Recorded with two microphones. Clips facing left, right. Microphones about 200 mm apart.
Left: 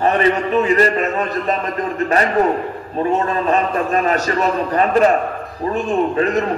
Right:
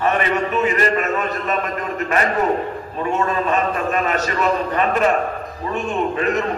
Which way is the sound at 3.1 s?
35° left (ahead or behind).